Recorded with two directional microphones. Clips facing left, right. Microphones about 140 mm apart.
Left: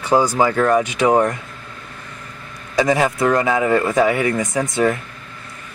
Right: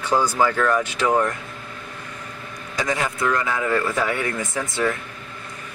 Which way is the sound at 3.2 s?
45° left (ahead or behind).